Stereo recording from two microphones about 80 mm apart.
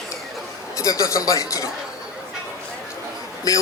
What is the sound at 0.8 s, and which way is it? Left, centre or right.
Speech, left.